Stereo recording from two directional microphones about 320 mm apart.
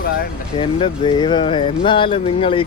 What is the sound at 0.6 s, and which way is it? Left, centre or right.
Speech, centre.